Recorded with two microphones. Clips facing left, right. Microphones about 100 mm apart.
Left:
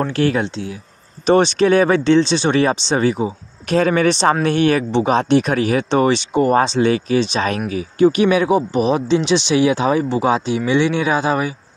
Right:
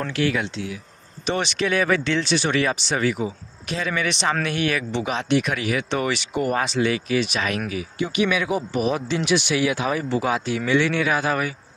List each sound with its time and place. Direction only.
0.0 s speech: 35° left (ahead or behind)
3.6 s speech: 45° left (ahead or behind); by 11.5 s 20° left (ahead or behind)